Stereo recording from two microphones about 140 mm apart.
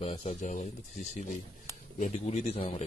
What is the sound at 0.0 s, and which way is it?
Speech, 40° left (ahead or behind).